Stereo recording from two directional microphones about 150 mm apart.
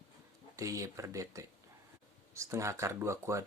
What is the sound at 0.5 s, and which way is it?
Speech, 20° right (ahead or behind).